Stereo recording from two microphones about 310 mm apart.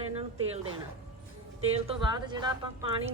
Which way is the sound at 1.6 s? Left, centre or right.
Centre.